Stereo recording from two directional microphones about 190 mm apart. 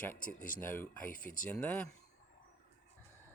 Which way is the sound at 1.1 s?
45° left (ahead or behind).